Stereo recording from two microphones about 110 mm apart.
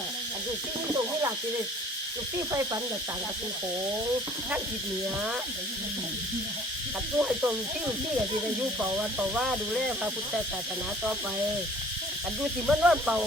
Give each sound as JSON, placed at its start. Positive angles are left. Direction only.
{"t": 7.2, "sound": "speech", "side_deg": -10}
{"t": 8.8, "sound": "speech", "side_deg": -10}
{"t": 12.4, "sound": "speech", "side_deg": -5}